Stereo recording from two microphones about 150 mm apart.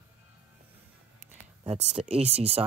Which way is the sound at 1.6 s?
45° right (ahead or behind).